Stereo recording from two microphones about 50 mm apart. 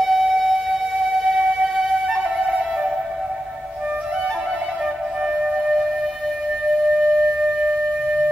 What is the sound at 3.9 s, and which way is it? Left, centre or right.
Music, right.